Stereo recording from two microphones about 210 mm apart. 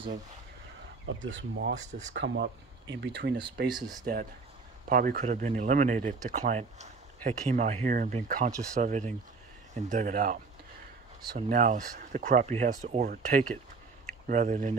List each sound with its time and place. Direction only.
1.3 s speech: 55° right (ahead or behind)
4.0 s speech: 45° right (ahead or behind)